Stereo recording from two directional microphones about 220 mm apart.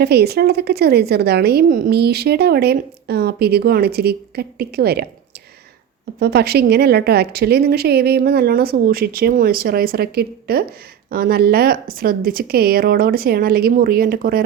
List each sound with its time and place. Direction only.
0.0 s a woman's voice: 45° right (ahead or behind)
6.1 s a woman's voice: 45° right (ahead or behind)